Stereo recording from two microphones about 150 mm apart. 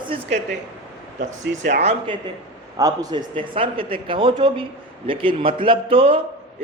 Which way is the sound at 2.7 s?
25° right (ahead or behind).